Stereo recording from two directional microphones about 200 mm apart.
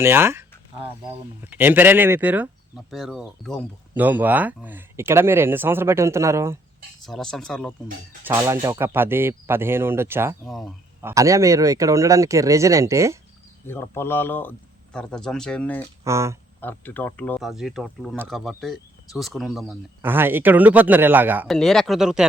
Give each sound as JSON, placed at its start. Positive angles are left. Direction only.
{"t": 0.0, "sound": "speech", "side_deg": -10}
{"t": 1.5, "sound": "speech", "side_deg": -10}
{"t": 7.0, "sound": "speech", "side_deg": 0}
{"t": 8.3, "sound": "speech", "side_deg": -15}
{"t": 10.4, "sound": "speech", "side_deg": 0}
{"t": 11.0, "sound": "speech", "side_deg": -15}
{"t": 13.7, "sound": "speech", "side_deg": 10}
{"t": 16.0, "sound": "speech", "side_deg": -15}
{"t": 16.6, "sound": "speech", "side_deg": 10}
{"t": 21.4, "sound": "speech", "side_deg": 0}